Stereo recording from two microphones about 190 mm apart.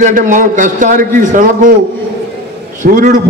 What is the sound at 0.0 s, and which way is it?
A man's voice, 40° right (ahead or behind).